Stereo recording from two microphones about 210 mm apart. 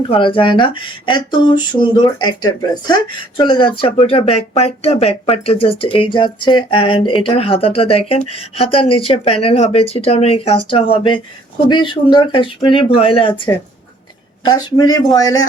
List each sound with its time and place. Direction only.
0.1 s speech: 25° left (ahead or behind)